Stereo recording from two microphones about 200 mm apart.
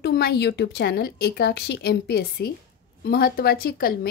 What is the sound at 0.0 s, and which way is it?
A woman's voice, 50° left (ahead or behind).